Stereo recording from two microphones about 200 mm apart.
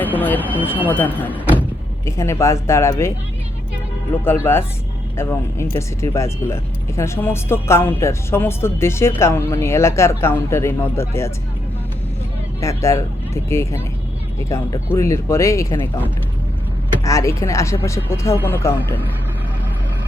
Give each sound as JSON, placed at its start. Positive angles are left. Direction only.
{"t": 0.0, "sound": "speech", "side_deg": 10}
{"t": 4.2, "sound": "speech", "side_deg": 10}
{"t": 12.5, "sound": "speech", "side_deg": 15}
{"t": 17.0, "sound": "speech", "side_deg": 15}